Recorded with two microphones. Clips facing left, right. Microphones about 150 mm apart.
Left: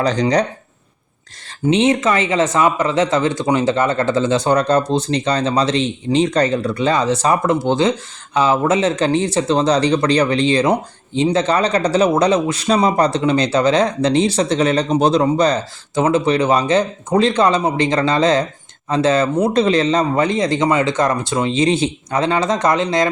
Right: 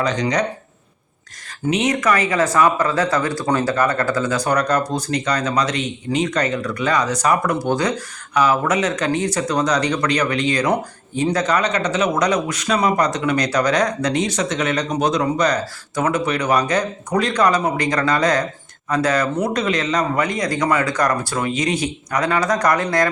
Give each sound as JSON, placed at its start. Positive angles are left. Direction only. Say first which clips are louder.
{"t": 0.0, "sound": "speech", "louder": "left 4 dB", "side_deg": 35}
{"t": 1.6, "sound": "speech", "louder": "left 4 dB", "side_deg": 30}